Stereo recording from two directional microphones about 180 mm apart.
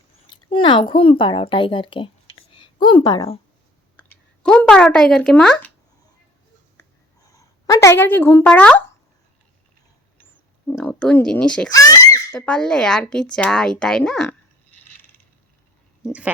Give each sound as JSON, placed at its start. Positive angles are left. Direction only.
{"t": 0.3, "sound": "speech", "side_deg": 25}
{"t": 3.9, "sound": "speech", "side_deg": 5}
{"t": 7.3, "sound": "speech", "side_deg": 20}
{"t": 10.7, "sound": "a woman's voice", "side_deg": 10}
{"t": 11.7, "sound": "a sound", "side_deg": 20}
{"t": 12.3, "sound": "a woman's voice", "side_deg": 5}